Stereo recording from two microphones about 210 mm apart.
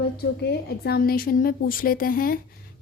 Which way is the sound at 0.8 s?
45° left (ahead or behind).